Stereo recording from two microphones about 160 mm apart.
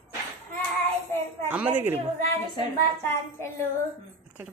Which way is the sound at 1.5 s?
10° right (ahead or behind).